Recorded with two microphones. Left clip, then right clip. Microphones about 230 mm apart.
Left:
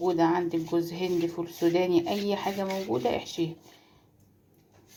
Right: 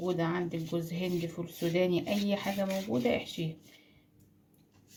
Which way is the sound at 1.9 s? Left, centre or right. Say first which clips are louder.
Left 5 dB; left.